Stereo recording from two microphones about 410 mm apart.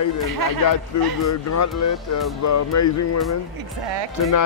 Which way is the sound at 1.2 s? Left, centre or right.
Left.